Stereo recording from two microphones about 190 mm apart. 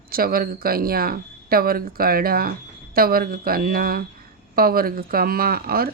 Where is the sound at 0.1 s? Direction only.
50° right (ahead or behind).